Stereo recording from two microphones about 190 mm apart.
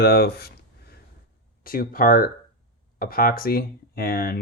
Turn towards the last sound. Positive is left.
turn(degrees=50)  # may be behind; listen again after turning